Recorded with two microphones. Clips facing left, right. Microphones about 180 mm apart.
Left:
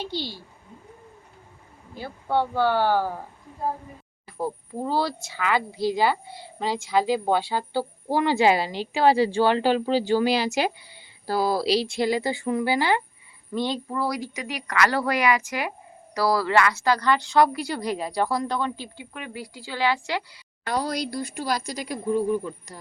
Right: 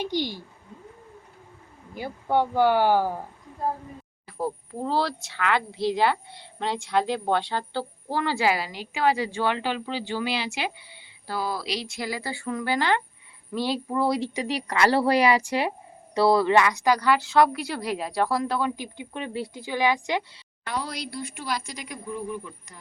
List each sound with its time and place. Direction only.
0.0 s speech: 15° right (ahead or behind)
2.0 s speech: 15° right (ahead or behind)
4.4 s a woman's voice: centre (ahead or behind)
13.5 s speech: 5° right (ahead or behind)
14.0 s a woman's voice: 25° right (ahead or behind); by 18.9 s 5° right (ahead or behind)
18.9 s a woman's voice: 30° right (ahead or behind)
20.7 s a woman's voice: 40° left (ahead or behind)